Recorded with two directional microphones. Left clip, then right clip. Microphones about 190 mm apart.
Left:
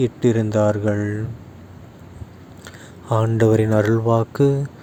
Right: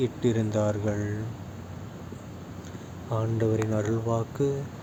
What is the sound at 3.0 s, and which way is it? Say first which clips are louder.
Speech: left 10 dB; 55° left (ahead or behind).